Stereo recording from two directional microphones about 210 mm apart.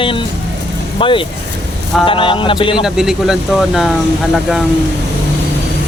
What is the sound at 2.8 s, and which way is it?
Speech, 5° right (ahead or behind).